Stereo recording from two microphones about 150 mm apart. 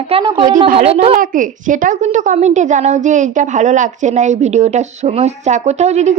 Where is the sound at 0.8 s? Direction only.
40° right (ahead or behind).